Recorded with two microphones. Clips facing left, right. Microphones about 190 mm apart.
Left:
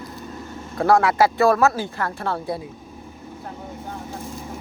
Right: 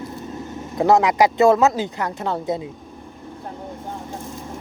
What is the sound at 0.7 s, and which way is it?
Speech, 20° right (ahead or behind).